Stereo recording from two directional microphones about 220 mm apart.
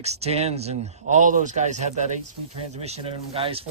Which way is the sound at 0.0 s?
30° right (ahead or behind).